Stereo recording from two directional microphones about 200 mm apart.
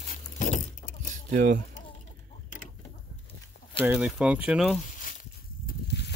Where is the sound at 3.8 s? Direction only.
5° right (ahead or behind).